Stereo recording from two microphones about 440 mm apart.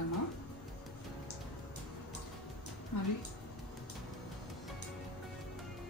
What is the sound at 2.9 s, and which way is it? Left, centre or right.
Speech, left.